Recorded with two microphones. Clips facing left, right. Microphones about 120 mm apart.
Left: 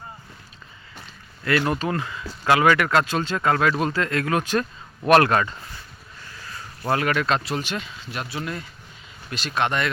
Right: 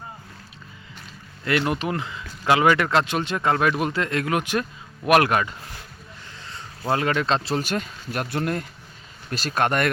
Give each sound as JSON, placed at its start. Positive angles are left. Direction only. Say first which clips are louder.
{"t": 1.5, "sound": "speech", "louder": "left 1 dB", "side_deg": -20}
{"t": 6.4, "sound": "speech", "louder": "even", "side_deg": -25}
{"t": 7.6, "sound": "speech", "louder": "right 3 dB", "side_deg": -45}
{"t": 9.3, "sound": "speech", "louder": "right 2 dB", "side_deg": -40}